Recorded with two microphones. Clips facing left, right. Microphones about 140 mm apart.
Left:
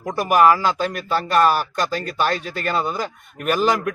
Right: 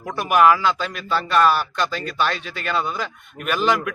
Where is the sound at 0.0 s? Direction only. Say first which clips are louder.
Left 1 dB; 40° left (ahead or behind).